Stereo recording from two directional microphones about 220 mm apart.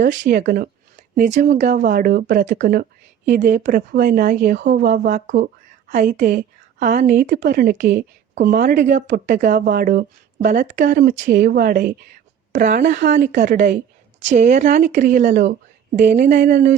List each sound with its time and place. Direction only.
0.0 s a woman's voice: 50° right (ahead or behind)
16.2 s speech: 50° right (ahead or behind)